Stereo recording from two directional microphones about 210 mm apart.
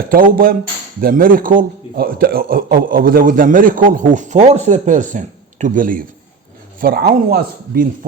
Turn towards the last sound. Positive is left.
turn(degrees=-45)  # may be behind; listen again after turning